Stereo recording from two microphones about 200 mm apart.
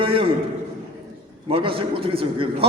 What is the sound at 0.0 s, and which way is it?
Speech, 25° right (ahead or behind).